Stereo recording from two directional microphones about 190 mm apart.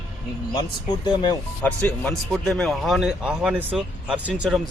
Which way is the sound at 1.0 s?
20° left (ahead or behind).